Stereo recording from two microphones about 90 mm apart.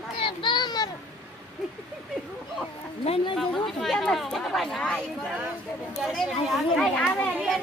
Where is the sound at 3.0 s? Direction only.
90° left.